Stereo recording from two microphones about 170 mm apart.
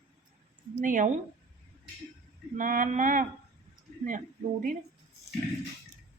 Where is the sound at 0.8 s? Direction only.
50° right (ahead or behind).